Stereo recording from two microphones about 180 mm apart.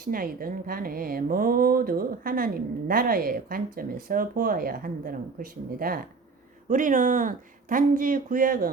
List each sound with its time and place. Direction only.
0.0 s a woman's voice: 55° right (ahead or behind)